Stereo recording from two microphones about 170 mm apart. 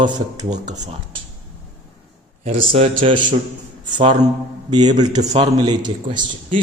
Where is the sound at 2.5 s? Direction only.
35° right (ahead or behind).